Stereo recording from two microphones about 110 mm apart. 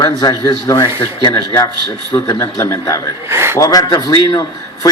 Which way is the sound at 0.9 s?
45° left (ahead or behind).